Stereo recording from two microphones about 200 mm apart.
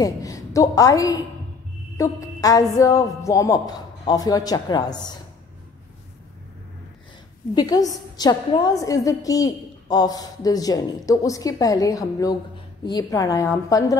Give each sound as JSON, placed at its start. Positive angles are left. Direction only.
{"t": 0.0, "sound": "a woman's voice", "side_deg": 15}
{"t": 7.5, "sound": "a woman's voice", "side_deg": 20}